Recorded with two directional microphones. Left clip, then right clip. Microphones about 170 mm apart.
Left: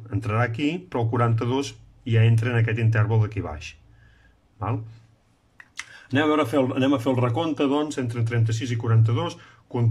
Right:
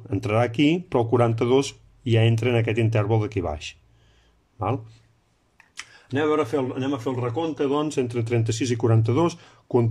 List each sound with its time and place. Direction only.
0.1 s speech: 20° right (ahead or behind)
6.1 s a man's voice: centre (ahead or behind)
7.7 s speech: 10° right (ahead or behind); by 9.8 s 25° right (ahead or behind)